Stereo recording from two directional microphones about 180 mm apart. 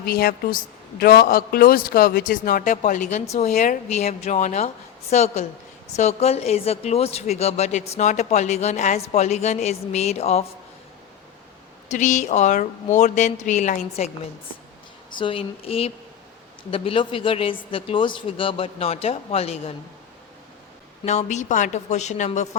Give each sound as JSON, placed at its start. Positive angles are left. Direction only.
{"t": 0.0, "sound": "a woman's voice", "side_deg": 55}
{"t": 11.9, "sound": "speech", "side_deg": 40}
{"t": 15.2, "sound": "a woman's voice", "side_deg": 30}
{"t": 21.0, "sound": "speech", "side_deg": 40}